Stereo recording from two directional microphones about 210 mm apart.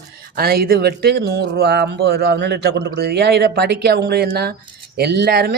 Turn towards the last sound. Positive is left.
turn(degrees=-50)  # may be behind; listen again after turning